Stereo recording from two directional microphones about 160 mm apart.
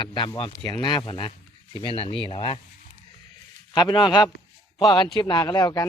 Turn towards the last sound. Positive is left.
turn(degrees=25)  # may be behind; listen again after turning